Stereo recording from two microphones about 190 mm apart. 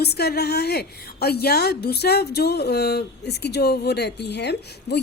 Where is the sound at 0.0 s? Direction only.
55° left (ahead or behind).